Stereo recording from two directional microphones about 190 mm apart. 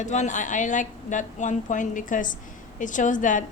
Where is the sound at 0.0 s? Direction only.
40° left (ahead or behind).